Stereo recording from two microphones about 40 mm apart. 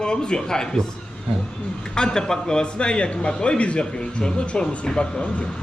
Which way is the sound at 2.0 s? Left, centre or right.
Centre.